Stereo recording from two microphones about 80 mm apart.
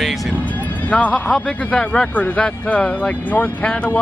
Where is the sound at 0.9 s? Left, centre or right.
Centre.